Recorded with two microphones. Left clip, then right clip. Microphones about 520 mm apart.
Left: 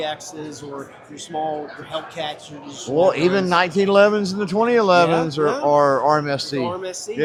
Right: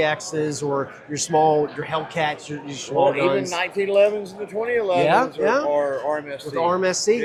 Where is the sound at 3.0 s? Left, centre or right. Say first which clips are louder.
Left 2 dB; left.